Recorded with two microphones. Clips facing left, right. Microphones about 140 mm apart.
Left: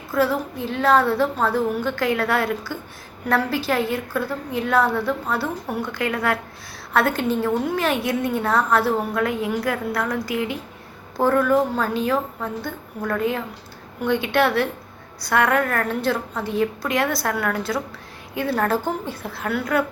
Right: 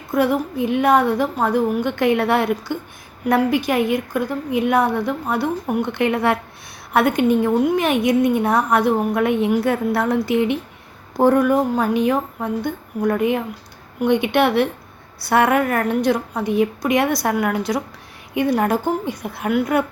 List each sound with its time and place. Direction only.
0.1 s a woman's voice: 20° right (ahead or behind)